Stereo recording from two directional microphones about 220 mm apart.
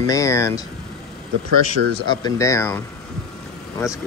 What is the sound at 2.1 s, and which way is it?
Speech, 15° left (ahead or behind).